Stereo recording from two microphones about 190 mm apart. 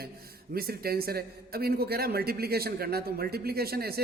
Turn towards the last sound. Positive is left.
turn(degrees=-55)  # may be behind; listen again after turning